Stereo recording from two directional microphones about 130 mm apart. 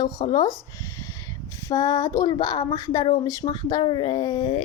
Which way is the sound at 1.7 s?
25° left (ahead or behind).